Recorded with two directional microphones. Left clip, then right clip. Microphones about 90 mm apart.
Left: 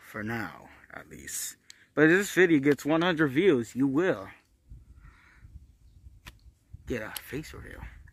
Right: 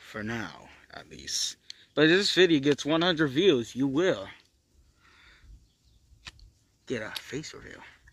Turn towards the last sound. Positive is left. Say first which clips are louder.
# right 1 dB
turn(degrees=25)  # may be behind; listen again after turning